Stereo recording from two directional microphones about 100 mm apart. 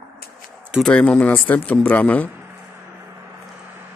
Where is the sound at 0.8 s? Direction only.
10° left (ahead or behind).